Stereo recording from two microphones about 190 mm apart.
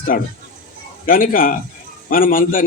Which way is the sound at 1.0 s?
45° left (ahead or behind).